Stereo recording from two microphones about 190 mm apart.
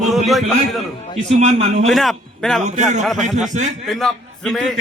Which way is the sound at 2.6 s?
40° right (ahead or behind).